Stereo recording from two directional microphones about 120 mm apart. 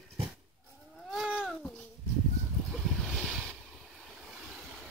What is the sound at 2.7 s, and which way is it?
Boat, 5° left (ahead or behind).